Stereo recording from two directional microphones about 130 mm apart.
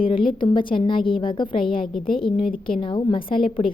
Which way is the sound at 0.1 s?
40° left (ahead or behind).